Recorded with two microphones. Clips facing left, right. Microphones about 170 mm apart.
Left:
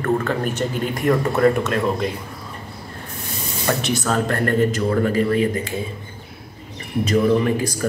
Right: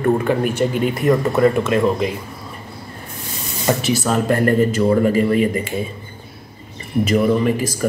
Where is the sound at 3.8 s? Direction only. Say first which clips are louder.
Right 2 dB; 5° right (ahead or behind).